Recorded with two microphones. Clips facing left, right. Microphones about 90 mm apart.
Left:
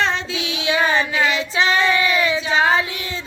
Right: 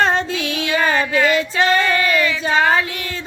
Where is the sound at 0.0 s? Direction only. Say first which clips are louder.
Right 4 dB; 45° right (ahead or behind).